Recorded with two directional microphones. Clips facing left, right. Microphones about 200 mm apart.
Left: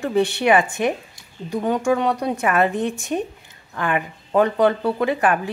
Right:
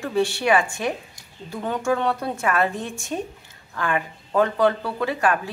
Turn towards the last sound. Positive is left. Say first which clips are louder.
# left 4 dB
turn(degrees=20)  # may be behind; listen again after turning